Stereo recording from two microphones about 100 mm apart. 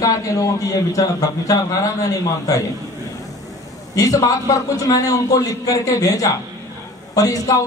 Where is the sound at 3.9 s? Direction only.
35° left (ahead or behind).